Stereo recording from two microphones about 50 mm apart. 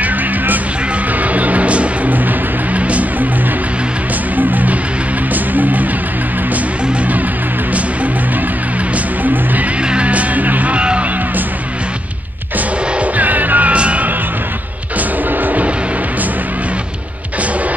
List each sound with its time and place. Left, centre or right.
0.0 s music: right
4.4 s music: right
9.8 s music: right
12.5 s music: right
15.0 s music: right